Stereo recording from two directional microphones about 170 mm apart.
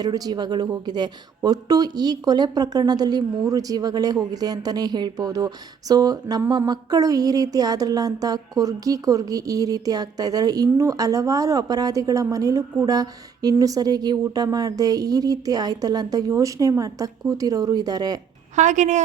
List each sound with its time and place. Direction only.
0.0 s speech: 20° right (ahead or behind)
18.5 s a woman's voice: 45° right (ahead or behind)